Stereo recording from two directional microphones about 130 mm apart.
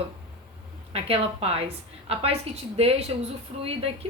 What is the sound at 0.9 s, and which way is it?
A woman's voice, 50° right (ahead or behind).